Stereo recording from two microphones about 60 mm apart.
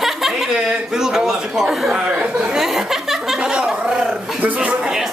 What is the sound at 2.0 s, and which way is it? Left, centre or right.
Speech, right.